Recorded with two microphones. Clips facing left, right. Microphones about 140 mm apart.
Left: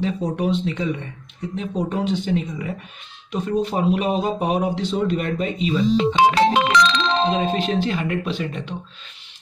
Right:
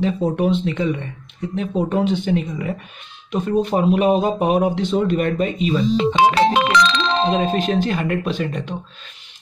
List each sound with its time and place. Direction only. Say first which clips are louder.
0.0 s speech: right 4 dB; 55° right (ahead or behind)